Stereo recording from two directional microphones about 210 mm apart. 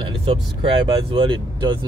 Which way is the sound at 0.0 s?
25° right (ahead or behind).